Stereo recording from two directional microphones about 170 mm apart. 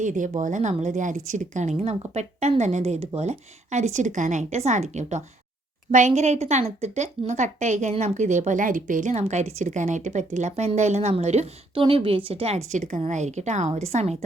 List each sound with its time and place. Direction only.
0.0 s a woman's voice: 50° right (ahead or behind)